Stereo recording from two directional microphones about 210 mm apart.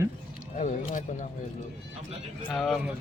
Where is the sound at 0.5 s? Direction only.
35° left (ahead or behind).